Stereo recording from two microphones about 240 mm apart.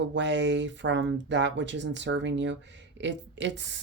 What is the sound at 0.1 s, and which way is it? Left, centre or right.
Speech, right.